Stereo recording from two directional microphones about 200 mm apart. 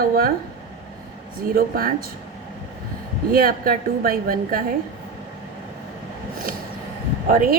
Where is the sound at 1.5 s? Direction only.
45° right (ahead or behind).